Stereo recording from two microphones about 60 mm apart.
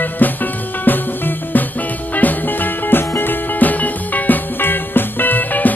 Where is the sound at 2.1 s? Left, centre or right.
Left.